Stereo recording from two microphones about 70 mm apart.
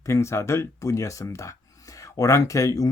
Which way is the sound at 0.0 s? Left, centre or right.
Left.